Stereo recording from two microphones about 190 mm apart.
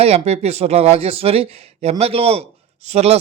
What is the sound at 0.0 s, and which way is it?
Speech, 35° right (ahead or behind).